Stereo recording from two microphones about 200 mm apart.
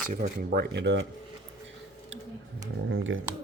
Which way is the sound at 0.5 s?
55° right (ahead or behind).